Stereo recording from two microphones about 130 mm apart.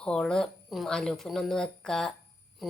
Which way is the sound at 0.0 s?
5° left (ahead or behind).